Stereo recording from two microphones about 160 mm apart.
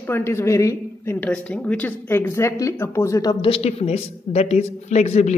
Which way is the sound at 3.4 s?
35° left (ahead or behind).